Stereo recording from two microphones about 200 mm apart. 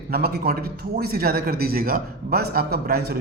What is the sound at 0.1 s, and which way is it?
A man's voice, 50° right (ahead or behind).